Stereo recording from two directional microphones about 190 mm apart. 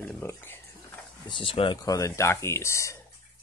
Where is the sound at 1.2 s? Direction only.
25° left (ahead or behind).